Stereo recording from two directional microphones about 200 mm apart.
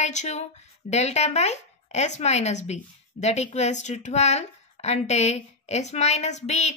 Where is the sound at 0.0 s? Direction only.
35° left (ahead or behind).